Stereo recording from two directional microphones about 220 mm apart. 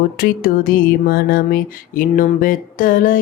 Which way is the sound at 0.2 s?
40° left (ahead or behind).